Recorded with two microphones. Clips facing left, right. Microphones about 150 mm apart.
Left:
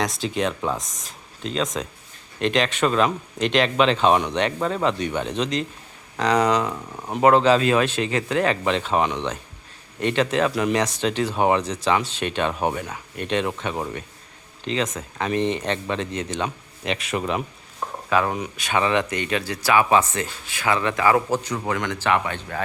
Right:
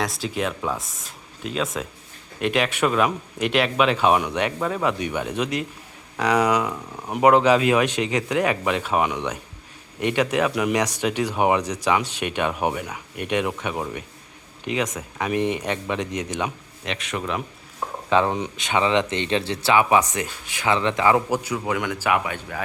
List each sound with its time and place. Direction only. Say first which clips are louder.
0.0 s speech: left 2 dB; centre (ahead or behind)
16.8 s a man's voice: left 3 dB; 5° left (ahead or behind)
18.1 s speech: right 2 dB; 25° right (ahead or behind); by 22.6 s 10° right (ahead or behind)